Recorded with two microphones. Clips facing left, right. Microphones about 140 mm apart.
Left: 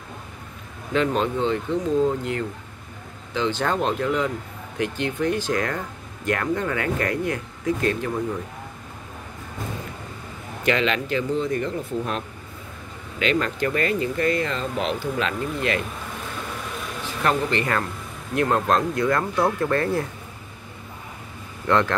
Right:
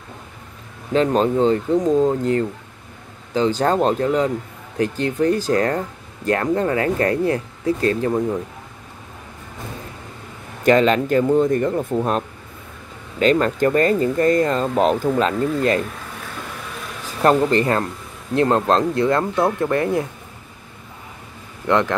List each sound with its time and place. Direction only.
0.9 s speech: 40° right (ahead or behind)
10.6 s speech: 45° right (ahead or behind)
17.0 s speech: 40° right (ahead or behind); by 20.1 s 20° right (ahead or behind)
21.6 s speech: 20° right (ahead or behind)